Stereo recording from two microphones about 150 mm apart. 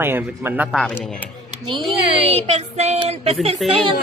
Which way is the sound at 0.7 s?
Centre (ahead or behind).